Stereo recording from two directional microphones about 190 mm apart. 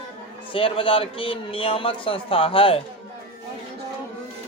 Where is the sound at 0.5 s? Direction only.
30° left (ahead or behind).